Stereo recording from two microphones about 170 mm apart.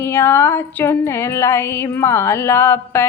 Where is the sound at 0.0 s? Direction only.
15° left (ahead or behind).